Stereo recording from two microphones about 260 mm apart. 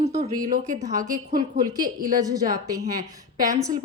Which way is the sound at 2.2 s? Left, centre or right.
Centre.